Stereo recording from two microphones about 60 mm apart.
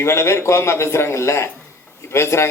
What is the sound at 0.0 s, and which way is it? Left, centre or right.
Speech, left.